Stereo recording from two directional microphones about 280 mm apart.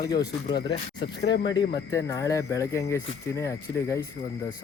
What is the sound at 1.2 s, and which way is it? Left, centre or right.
Speech, left.